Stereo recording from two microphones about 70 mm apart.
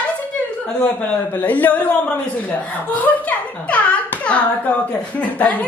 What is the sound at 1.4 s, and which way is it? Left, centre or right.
A woman's voice, left.